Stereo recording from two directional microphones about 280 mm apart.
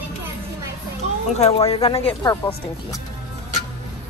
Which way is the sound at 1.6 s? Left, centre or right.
Centre.